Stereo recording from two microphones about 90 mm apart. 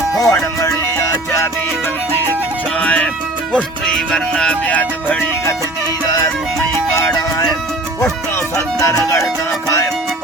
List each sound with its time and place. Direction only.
0.2 s music: 35° left (ahead or behind)
2.8 s music: 10° left (ahead or behind)
6.1 s music: 40° left (ahead or behind)
8.5 s music: 40° left (ahead or behind)